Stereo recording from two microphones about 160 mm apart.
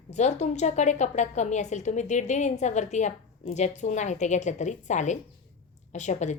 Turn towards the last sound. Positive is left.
turn(degrees=45)  # may be behind; listen again after turning